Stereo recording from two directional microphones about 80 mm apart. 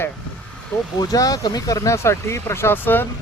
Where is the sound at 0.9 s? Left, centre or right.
Left.